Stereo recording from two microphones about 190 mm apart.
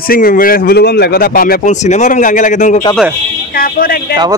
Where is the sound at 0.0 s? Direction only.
50° left (ahead or behind).